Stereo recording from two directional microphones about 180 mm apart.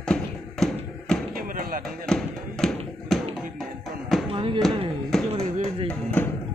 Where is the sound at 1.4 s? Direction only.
50° right (ahead or behind).